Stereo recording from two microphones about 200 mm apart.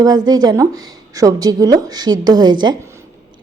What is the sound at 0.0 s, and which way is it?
A woman's voice, 20° right (ahead or behind).